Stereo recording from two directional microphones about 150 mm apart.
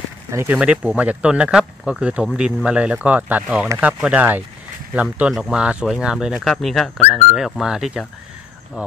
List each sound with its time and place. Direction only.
0.3 s speech: 20° right (ahead or behind)
0.6 s speech: 10° right (ahead or behind)